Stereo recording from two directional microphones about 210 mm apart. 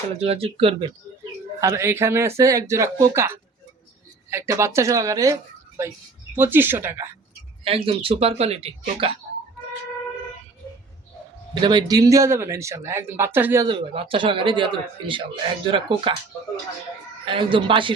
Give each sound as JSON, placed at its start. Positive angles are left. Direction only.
{"t": 0.2, "sound": "a man's voice", "side_deg": -25}
{"t": 1.6, "sound": "speech", "side_deg": -15}
{"t": 7.6, "sound": "a man's voice", "side_deg": -25}
{"t": 11.6, "sound": "speech", "side_deg": -20}
{"t": 13.7, "sound": "a man's voice", "side_deg": -25}
{"t": 17.2, "sound": "a man's voice", "side_deg": -25}